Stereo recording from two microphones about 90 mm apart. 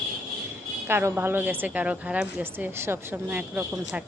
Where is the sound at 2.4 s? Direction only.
25° right (ahead or behind).